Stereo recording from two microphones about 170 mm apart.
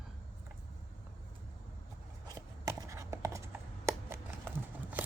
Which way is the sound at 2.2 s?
20° right (ahead or behind).